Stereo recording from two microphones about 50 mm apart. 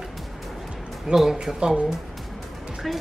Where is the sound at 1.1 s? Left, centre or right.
Centre.